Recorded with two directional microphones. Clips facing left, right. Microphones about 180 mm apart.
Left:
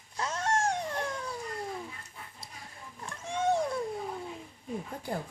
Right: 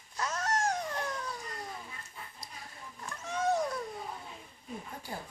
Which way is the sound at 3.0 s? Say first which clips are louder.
Left 2 dB; 30° left (ahead or behind).